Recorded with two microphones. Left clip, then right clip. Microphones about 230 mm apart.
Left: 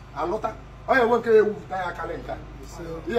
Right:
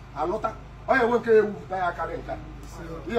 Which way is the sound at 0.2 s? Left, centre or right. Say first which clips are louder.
Even; centre.